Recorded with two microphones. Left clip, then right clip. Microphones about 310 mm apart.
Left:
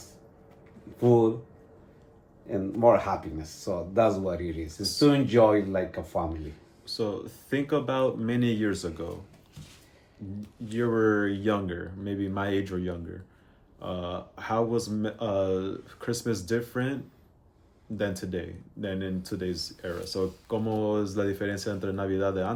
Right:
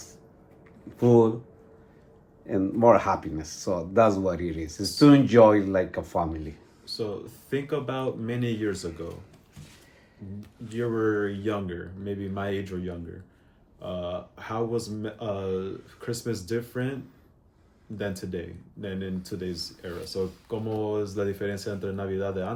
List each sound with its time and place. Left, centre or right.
0.9 s speech: right
2.5 s speech: right
6.8 s speech: centre
10.7 s speech: centre
17.9 s speech: centre